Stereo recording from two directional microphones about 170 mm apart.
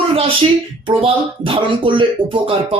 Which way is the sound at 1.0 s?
35° right (ahead or behind).